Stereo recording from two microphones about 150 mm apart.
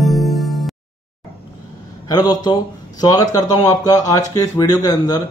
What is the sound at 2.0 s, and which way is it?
A man's voice, 25° left (ahead or behind).